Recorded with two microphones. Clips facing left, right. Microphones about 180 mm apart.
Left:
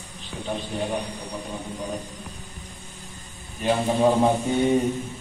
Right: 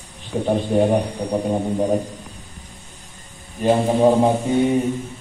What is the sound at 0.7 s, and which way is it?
A man's voice, 50° right (ahead or behind).